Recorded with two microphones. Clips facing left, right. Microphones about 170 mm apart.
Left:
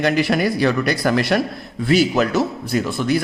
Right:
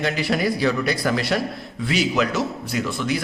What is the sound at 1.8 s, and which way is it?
A man's voice, 40° left (ahead or behind).